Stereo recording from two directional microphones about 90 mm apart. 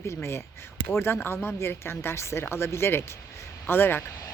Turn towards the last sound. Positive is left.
turn(degrees=25)  # may be behind; listen again after turning